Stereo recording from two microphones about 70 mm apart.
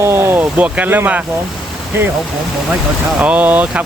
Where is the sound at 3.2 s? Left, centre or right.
Right.